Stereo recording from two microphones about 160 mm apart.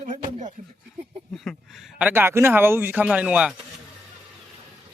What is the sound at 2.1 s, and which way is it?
Speech, 15° right (ahead or behind).